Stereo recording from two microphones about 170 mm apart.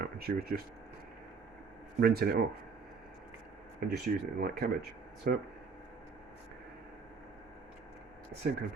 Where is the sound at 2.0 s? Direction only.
65° right (ahead or behind).